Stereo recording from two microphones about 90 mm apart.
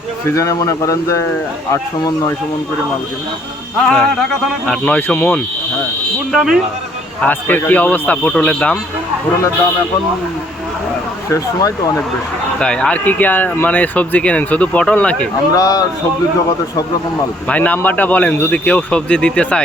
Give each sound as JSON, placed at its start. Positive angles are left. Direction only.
{"t": 0.3, "sound": "speech", "side_deg": 35}
{"t": 3.8, "sound": "speech", "side_deg": 5}
{"t": 6.3, "sound": "a man's voice", "side_deg": -5}
{"t": 7.2, "sound": "a man's voice", "side_deg": 20}
{"t": 11.3, "sound": "speech", "side_deg": 40}
{"t": 12.5, "sound": "speech", "side_deg": 10}
{"t": 15.5, "sound": "speech", "side_deg": 45}
{"t": 17.5, "sound": "speech", "side_deg": 20}